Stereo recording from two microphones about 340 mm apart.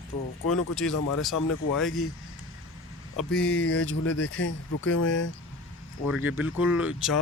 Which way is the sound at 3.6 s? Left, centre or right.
Left.